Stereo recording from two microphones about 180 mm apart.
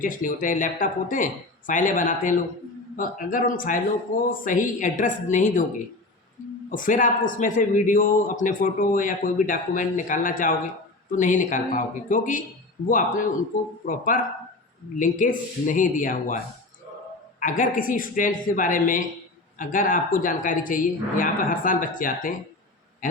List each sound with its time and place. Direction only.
0.0 s a man's voice: 50° left (ahead or behind)
6.7 s a man's voice: 50° left (ahead or behind)
13.8 s a man's voice: 50° left (ahead or behind)
17.4 s a man's voice: 45° left (ahead or behind)